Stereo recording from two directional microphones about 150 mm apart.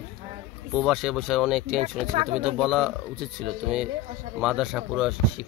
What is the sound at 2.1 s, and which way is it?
Speech, 35° right (ahead or behind).